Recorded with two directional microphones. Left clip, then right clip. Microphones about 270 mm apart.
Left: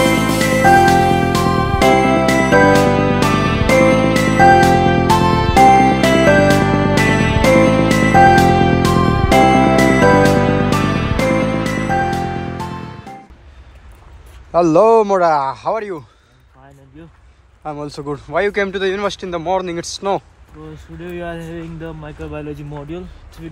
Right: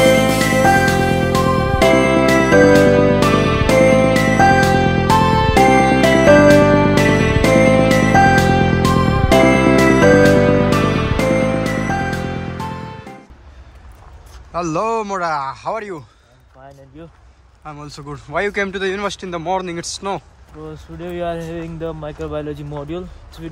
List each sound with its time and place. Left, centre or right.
0.0 s music: centre
14.5 s a man's voice: centre
17.6 s speech: centre